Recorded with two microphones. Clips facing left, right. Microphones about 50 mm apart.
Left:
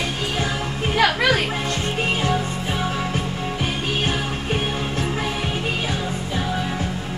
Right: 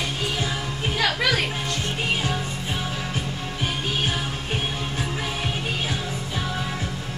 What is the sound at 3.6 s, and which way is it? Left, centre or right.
Music, left.